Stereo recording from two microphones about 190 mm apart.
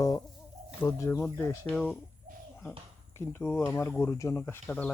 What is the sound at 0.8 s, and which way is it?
Speech, 15° left (ahead or behind).